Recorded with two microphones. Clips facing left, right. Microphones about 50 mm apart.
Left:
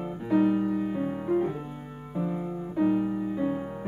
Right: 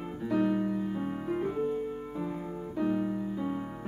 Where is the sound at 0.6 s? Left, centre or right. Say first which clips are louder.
Left 4 dB; left.